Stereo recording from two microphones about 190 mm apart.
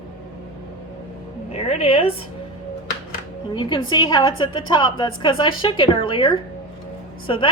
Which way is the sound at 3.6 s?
25° left (ahead or behind).